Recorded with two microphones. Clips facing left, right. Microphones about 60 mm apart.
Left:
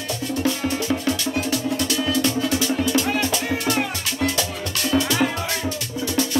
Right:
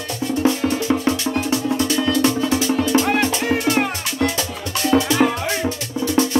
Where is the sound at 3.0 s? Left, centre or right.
Right.